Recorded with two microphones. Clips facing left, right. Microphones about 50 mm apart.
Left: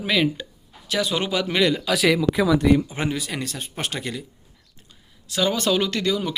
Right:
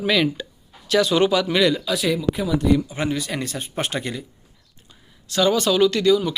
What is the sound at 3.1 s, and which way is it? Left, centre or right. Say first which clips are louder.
Speech: right 3 dB; centre.